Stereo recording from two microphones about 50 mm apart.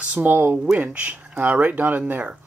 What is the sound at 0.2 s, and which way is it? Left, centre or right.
Speech, right.